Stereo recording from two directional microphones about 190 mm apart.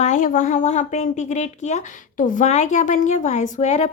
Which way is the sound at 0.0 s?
40° left (ahead or behind).